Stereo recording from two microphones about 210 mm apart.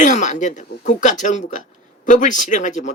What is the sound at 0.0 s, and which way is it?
Speech, 35° left (ahead or behind).